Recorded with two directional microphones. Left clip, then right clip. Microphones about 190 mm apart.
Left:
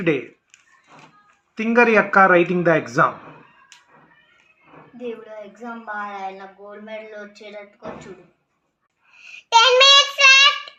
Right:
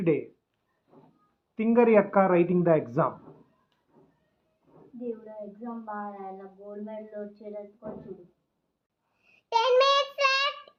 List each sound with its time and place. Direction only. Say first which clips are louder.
1.5 s speech: left 6 dB; 10° left (ahead or behind)
9.2 s a child's voice: left 11 dB; 15° right (ahead or behind)